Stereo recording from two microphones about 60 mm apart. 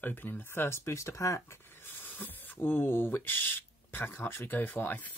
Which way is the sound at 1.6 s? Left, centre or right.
Left.